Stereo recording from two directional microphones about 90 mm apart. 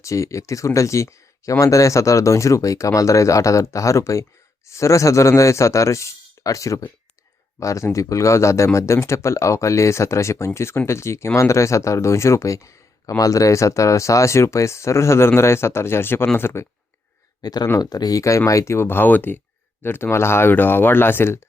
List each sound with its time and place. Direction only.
0.0 s speech: 35° left (ahead or behind)
17.4 s speech: 50° left (ahead or behind); by 21.3 s 25° left (ahead or behind)